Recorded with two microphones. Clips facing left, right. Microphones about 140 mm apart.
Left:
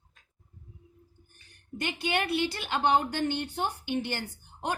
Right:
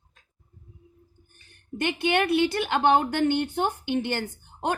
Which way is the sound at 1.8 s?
60° right (ahead or behind).